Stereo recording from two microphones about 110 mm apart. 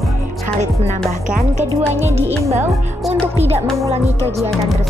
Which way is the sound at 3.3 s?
70° right (ahead or behind).